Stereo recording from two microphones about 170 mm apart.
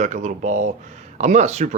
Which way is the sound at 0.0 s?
45° right (ahead or behind).